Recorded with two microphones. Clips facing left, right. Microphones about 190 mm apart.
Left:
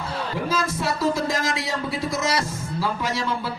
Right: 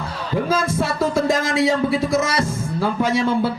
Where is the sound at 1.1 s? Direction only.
50° right (ahead or behind).